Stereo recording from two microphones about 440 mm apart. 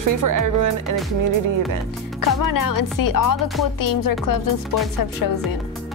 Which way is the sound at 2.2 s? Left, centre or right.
Left.